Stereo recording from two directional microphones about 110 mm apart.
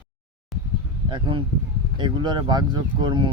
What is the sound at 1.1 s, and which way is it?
Speech, 45° right (ahead or behind).